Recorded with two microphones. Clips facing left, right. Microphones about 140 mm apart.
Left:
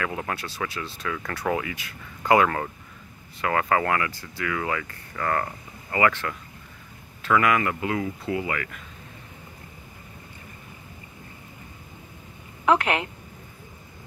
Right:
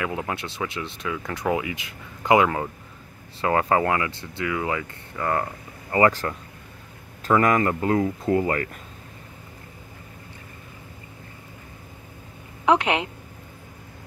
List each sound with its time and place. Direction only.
0.0 s speech: 20° right (ahead or behind)
3.3 s speech: 25° right (ahead or behind)
5.9 s speech: 30° right (ahead or behind)
12.6 s a woman's voice: 20° right (ahead or behind)